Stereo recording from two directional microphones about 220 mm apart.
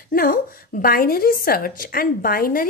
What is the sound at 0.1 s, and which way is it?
A woman's voice, 40° left (ahead or behind).